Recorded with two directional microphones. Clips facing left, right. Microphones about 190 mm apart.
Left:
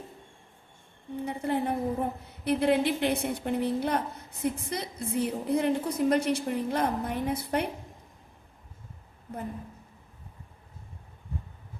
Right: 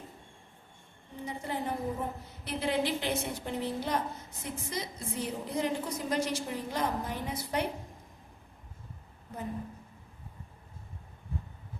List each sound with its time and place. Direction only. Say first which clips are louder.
1.2 s a woman's voice: left 6 dB; 60° left (ahead or behind)